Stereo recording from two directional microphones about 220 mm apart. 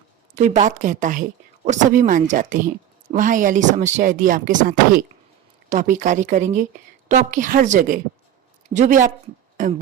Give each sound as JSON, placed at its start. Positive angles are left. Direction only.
{"t": 0.3, "sound": "speech", "side_deg": -35}